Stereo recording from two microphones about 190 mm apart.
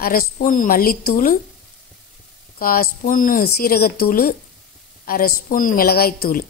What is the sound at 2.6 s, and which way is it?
Speech, 50° left (ahead or behind).